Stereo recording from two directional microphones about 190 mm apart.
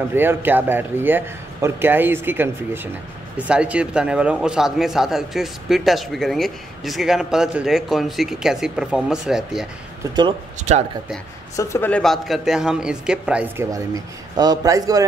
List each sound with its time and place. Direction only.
0.1 s a man's voice: 10° right (ahead or behind)
11.5 s speech: 10° left (ahead or behind); by 13.7 s 5° right (ahead or behind)
14.3 s a man's voice: 20° right (ahead or behind)